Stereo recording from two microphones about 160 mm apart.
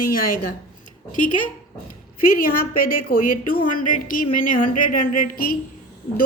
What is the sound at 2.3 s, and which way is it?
A woman's voice, 60° left (ahead or behind).